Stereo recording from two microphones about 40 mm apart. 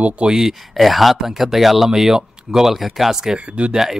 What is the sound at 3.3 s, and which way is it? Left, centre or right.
Speech, right.